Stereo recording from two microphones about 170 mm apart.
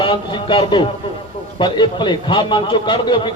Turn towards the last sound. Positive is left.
turn(degrees=30)  # may be behind; listen again after turning